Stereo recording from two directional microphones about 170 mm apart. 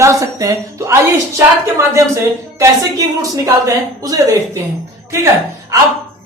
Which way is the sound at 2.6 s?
20° right (ahead or behind).